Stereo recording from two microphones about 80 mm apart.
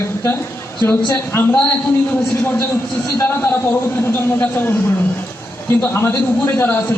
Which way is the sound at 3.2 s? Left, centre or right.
Left.